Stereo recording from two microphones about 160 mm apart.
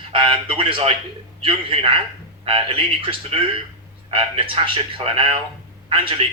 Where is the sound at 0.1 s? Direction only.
35° right (ahead or behind).